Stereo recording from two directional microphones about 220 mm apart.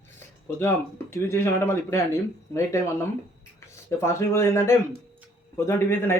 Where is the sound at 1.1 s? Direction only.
10° left (ahead or behind).